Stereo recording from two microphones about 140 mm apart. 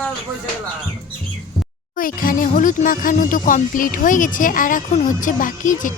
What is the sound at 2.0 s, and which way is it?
Speech, 85° left.